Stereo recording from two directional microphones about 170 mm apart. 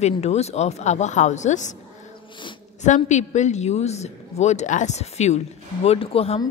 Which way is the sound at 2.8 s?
45° left (ahead or behind).